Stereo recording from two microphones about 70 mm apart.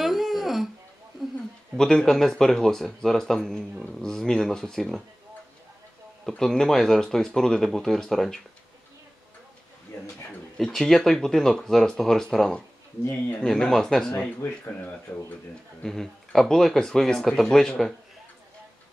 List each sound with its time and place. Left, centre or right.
0.0 s a sound: centre
1.8 s speech: centre
6.2 s speech: centre
10.6 s speech: centre
14.4 s speech: left
15.8 s speech: centre